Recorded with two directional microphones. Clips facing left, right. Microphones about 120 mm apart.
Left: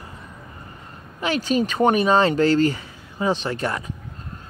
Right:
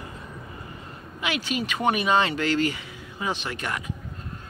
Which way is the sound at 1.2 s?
40° left (ahead or behind).